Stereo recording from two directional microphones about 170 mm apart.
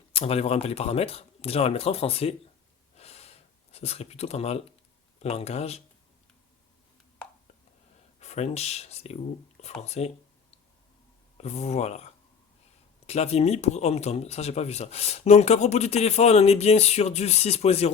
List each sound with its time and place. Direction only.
0.1 s speech: 35° left (ahead or behind)
2.9 s gasp: 35° left (ahead or behind)
5.2 s speech: 40° left (ahead or behind)
8.2 s speech: 40° left (ahead or behind)
11.3 s speech: 40° left (ahead or behind)
13.1 s speech: 35° left (ahead or behind)